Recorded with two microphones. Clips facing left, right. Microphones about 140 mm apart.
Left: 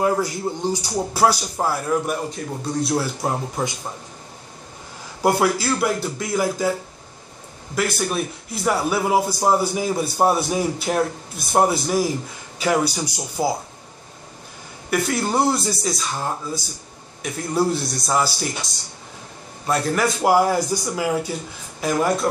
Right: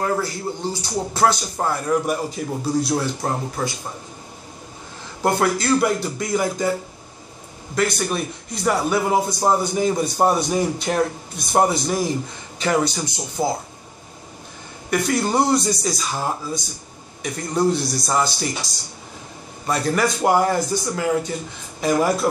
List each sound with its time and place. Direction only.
0.0 s a man's voice: 15° left (ahead or behind)
3.6 s speech: 15° left (ahead or behind)
5.2 s a man's voice: 5° left (ahead or behind)
7.7 s a man's voice: 5° left (ahead or behind)
14.9 s a man's voice: centre (ahead or behind)
21.8 s a man's voice: centre (ahead or behind)